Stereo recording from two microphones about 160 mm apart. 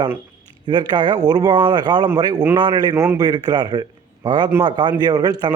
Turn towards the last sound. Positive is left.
turn(degrees=-25)  # may be behind; listen again after turning